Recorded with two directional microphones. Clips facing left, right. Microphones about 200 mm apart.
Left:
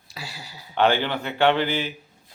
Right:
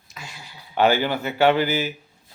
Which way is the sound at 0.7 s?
5° right (ahead or behind).